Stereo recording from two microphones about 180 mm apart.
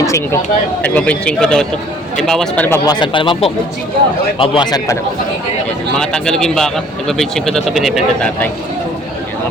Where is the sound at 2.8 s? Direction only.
25° left (ahead or behind).